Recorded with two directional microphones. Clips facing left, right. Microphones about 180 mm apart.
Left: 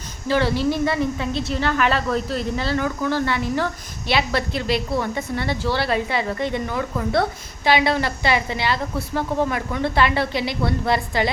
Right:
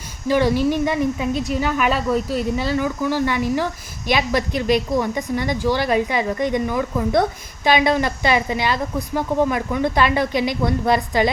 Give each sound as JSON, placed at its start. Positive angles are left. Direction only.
{"t": 0.3, "sound": "speech", "side_deg": -15}